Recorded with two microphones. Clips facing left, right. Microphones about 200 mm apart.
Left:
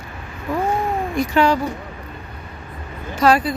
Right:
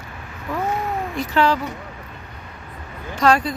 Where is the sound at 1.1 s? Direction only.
15° left (ahead or behind).